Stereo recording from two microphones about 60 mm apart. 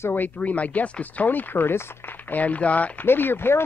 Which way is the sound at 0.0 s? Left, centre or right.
Left.